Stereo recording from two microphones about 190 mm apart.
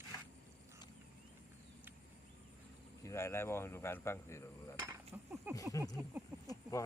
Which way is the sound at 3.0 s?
15° left (ahead or behind).